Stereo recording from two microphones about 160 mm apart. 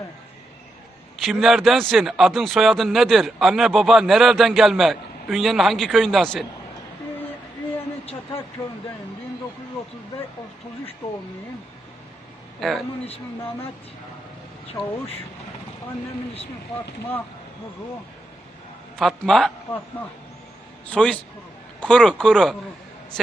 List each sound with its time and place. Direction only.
1.2 s a man's voice: centre (ahead or behind)
8.6 s a man's voice: 15° left (ahead or behind)
12.5 s a man's voice: centre (ahead or behind)
18.9 s a man's voice: centre (ahead or behind)
20.9 s a man's voice: 5° left (ahead or behind)